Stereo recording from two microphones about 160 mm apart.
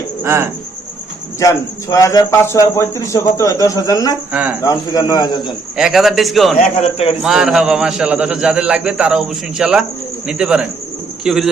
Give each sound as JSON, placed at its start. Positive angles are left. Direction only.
{"t": 0.2, "sound": "cricket", "side_deg": -15}
{"t": 1.4, "sound": "speech", "side_deg": 20}
{"t": 4.3, "sound": "cricket", "side_deg": -10}
{"t": 4.6, "sound": "speech", "side_deg": 25}
{"t": 5.7, "sound": "a man's voice", "side_deg": 0}
{"t": 6.6, "sound": "a man's voice", "side_deg": 40}
{"t": 7.2, "sound": "a man's voice", "side_deg": -5}